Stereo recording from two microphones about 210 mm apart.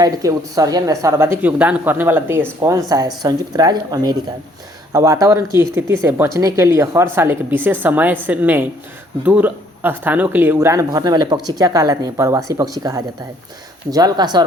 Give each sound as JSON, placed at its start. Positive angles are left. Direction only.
{"t": 0.0, "sound": "speech", "side_deg": -15}